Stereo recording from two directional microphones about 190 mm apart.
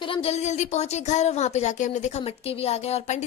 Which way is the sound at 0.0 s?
30° left (ahead or behind).